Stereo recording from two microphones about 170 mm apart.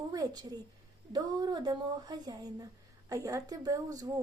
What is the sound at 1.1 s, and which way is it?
A woman's voice, 25° right (ahead or behind).